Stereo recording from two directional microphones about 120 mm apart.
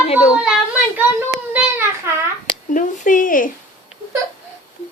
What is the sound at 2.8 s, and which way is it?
Speech, 90° left.